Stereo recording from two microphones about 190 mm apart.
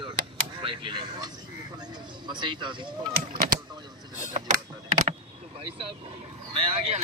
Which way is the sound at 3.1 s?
50° right (ahead or behind).